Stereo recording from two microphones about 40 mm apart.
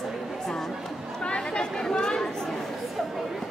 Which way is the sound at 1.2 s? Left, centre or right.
Left.